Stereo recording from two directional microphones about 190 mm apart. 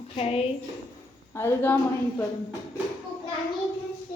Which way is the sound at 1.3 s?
15° left (ahead or behind).